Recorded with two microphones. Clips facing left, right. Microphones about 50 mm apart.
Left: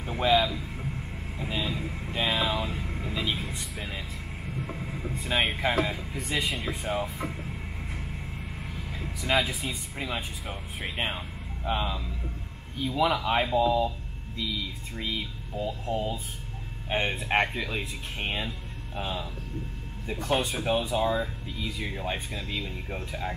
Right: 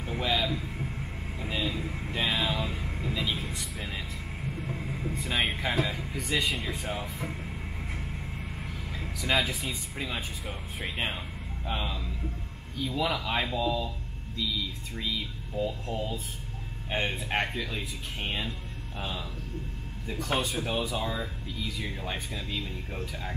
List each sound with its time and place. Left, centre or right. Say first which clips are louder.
0.0 s a sound: left 5 dB; centre
0.5 s hum: right 1 dB; centre
1.4 s vehicle: left 1 dB; centre
3.3 s speech: left 1 dB; centre
4.5 s train: even; centre
5.1 s vehicle: left 4 dB; centre
5.4 s speech: left 3 dB; centre
9.2 s speech: left 1 dB; centre
15.0 s speech: left 1 dB; left
15.5 s speech: left 1 dB; centre
20.3 s speech: left 3 dB; centre